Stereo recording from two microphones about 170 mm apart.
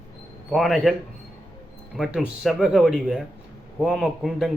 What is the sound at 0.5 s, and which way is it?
Speech, centre (ahead or behind).